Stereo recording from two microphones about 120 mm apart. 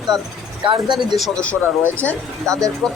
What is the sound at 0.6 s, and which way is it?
Speech, 40° right (ahead or behind).